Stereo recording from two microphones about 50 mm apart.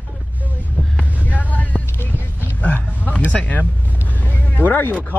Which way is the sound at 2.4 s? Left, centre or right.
Left.